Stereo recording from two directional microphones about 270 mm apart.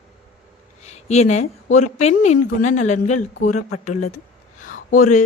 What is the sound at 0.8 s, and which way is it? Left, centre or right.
A woman's voice, left.